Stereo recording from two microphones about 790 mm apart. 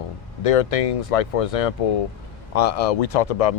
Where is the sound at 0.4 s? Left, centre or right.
Left.